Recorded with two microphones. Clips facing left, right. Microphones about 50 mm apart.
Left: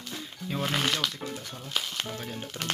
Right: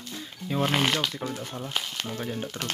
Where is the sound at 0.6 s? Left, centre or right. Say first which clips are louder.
Right 4 dB; right.